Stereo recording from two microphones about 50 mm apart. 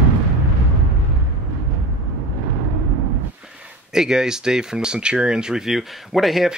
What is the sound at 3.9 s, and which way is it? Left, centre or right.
Speech, centre.